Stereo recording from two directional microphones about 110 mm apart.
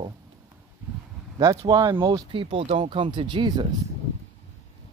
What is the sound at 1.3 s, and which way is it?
Speech, 35° right (ahead or behind).